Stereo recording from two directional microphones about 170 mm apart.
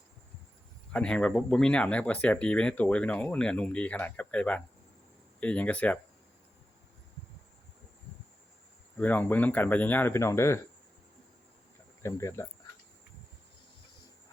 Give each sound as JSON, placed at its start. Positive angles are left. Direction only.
{"t": 0.9, "sound": "speech", "side_deg": 5}
{"t": 9.0, "sound": "speech", "side_deg": 10}
{"t": 12.0, "sound": "speech", "side_deg": 15}